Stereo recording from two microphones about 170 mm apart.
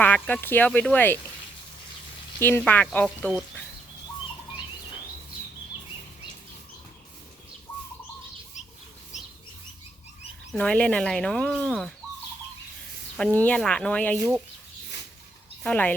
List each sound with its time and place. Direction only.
0.0 s speech: 10° left (ahead or behind)
2.4 s speech: 10° left (ahead or behind)
8.6 s a sound: 45° left (ahead or behind)
10.5 s speech: 5° left (ahead or behind)
13.1 s speech: 5° left (ahead or behind)
15.6 s speech: 10° left (ahead or behind)